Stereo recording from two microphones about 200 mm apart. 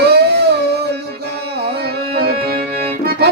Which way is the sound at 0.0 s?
55° right (ahead or behind).